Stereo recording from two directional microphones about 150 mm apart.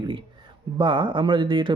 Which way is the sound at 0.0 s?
35° right (ahead or behind).